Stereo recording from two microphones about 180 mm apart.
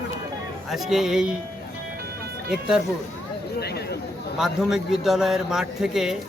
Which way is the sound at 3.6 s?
60° left (ahead or behind).